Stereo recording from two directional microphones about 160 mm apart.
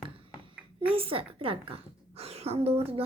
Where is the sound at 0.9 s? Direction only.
35° right (ahead or behind).